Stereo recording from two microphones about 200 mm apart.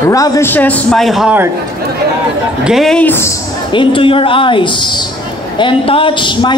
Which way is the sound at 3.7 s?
25° left (ahead or behind).